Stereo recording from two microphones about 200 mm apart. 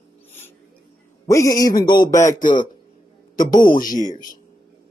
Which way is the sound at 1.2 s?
15° left (ahead or behind).